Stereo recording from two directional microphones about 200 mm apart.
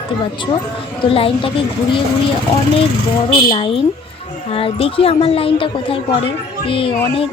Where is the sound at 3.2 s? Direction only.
25° left (ahead or behind).